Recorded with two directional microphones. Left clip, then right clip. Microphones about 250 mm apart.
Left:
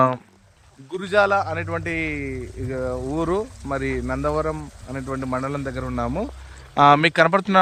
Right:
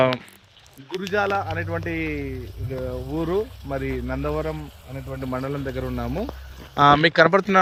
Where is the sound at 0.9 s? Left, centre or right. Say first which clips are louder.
Left 5 dB; centre.